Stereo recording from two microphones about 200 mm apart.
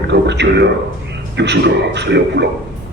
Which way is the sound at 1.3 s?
60° right (ahead or behind).